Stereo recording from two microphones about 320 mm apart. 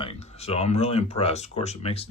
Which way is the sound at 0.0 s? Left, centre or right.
Centre.